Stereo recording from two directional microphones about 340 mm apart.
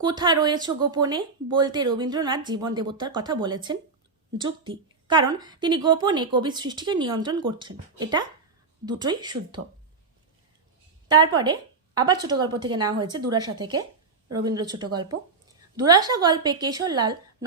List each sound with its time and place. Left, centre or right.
0.0 s a woman's voice: centre
11.1 s a woman's voice: centre